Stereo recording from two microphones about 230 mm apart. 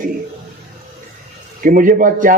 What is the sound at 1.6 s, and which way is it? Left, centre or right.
Speech, right.